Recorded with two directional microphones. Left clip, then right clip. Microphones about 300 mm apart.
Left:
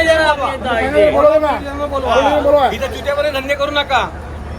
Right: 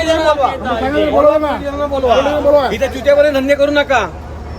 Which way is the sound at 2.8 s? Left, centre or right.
Right.